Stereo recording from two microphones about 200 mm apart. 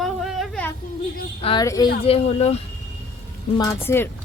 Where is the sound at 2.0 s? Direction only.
30° left (ahead or behind).